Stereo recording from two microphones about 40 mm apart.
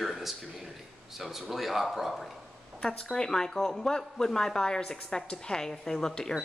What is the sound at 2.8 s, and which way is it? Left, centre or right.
A woman's voice, left.